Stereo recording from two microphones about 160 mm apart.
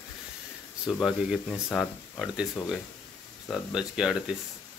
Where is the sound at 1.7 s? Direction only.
10° left (ahead or behind).